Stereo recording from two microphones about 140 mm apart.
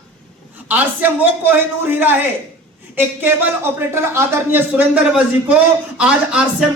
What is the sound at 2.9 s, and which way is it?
Speech, 15° right (ahead or behind).